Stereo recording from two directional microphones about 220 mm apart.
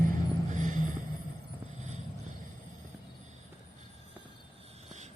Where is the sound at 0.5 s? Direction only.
35° right (ahead or behind).